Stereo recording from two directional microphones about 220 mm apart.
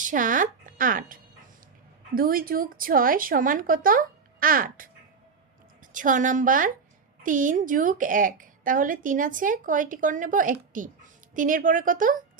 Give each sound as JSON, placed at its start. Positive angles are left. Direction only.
{"t": 0.0, "sound": "a woman's voice", "side_deg": -35}
{"t": 5.9, "sound": "a woman's voice", "side_deg": -35}